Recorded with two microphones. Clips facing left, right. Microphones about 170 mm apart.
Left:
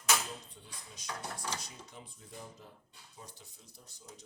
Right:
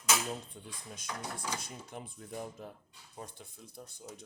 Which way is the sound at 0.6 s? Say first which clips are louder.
Right 7 dB; 50° right (ahead or behind).